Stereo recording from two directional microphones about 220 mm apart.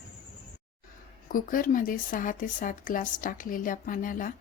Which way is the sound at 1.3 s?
40° left (ahead or behind).